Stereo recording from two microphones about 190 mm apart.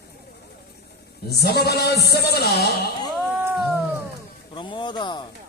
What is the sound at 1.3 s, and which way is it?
Music, 55° left (ahead or behind).